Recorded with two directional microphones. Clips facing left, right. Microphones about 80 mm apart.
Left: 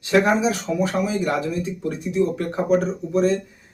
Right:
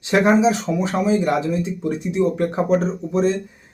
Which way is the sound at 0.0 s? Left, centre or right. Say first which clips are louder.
Right 3 dB; right.